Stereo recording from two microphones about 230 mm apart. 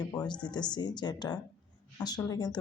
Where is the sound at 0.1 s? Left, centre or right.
Centre.